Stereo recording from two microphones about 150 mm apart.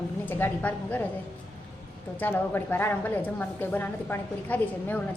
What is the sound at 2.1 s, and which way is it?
A woman's voice, 15° left (ahead or behind).